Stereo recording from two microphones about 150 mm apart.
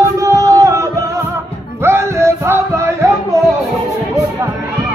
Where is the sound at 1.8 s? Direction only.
20° right (ahead or behind).